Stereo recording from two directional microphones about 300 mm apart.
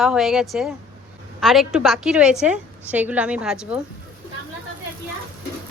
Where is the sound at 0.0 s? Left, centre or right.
Centre.